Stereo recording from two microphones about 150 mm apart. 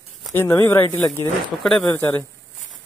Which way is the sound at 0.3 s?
15° left (ahead or behind).